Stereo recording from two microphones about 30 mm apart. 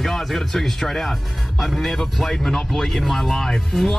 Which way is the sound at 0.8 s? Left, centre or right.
Centre.